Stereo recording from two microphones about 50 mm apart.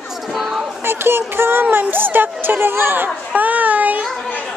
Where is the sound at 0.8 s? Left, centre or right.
Right.